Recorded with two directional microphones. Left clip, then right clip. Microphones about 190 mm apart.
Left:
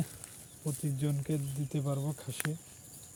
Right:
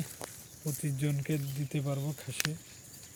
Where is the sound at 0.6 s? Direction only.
10° left (ahead or behind).